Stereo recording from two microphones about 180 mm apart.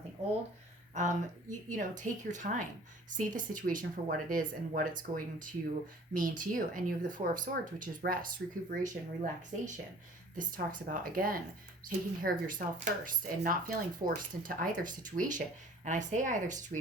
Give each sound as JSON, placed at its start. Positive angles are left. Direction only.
{"t": 0.9, "sound": "speech", "side_deg": -45}